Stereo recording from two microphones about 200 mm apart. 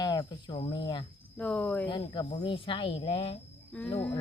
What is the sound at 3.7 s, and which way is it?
Speech, 5° left (ahead or behind).